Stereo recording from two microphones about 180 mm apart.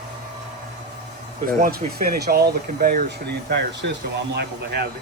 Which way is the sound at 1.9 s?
60° right (ahead or behind).